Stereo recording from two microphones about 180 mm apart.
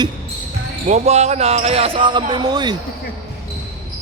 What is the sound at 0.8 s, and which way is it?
Speech, 40° right (ahead or behind).